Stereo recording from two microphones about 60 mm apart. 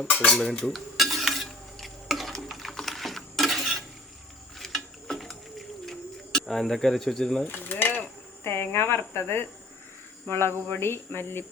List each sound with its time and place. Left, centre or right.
0.3 s cutlery: centre
0.7 s stir: centre
4.6 s bird: centre
7.4 s a sound: left
8.4 s speech: left